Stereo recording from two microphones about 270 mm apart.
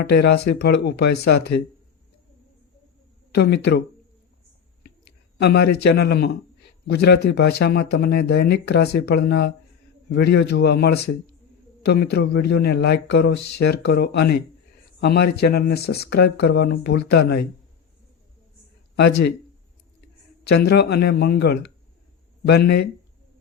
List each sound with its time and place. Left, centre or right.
0.1 s speech: left
3.3 s speech: left
5.4 s speech: left
20.4 s speech: left